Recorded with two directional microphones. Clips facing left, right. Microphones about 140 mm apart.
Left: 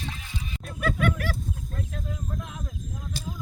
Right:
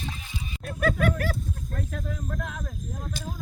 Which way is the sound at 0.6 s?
50° right (ahead or behind).